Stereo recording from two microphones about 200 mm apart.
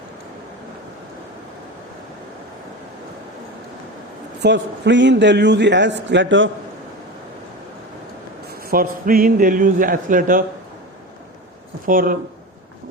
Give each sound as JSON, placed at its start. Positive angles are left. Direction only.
{"t": 4.4, "sound": "a man's voice", "side_deg": -60}
{"t": 8.4, "sound": "a man's voice", "side_deg": -45}
{"t": 11.9, "sound": "a man's voice", "side_deg": -45}